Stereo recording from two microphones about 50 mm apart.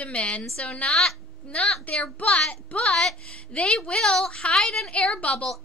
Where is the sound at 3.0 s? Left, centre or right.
Centre.